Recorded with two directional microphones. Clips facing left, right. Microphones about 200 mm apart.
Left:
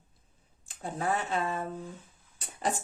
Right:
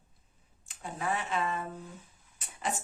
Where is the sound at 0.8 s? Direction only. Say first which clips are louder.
Left 3 dB; 35° left (ahead or behind).